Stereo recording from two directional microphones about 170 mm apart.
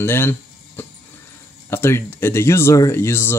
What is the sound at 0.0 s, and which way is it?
Speech, 15° left (ahead or behind).